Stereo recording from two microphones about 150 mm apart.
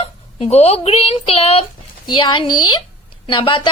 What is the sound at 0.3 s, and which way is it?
A woman's voice, 45° left (ahead or behind).